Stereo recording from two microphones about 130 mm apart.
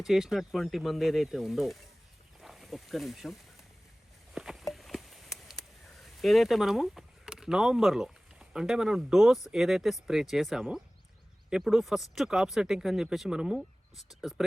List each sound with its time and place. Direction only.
0.0 s speech: centre (ahead or behind)
2.4 s a sound: centre (ahead or behind)
6.0 s speech: centre (ahead or behind)